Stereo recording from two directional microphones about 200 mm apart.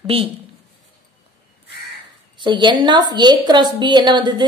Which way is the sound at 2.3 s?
25° right (ahead or behind).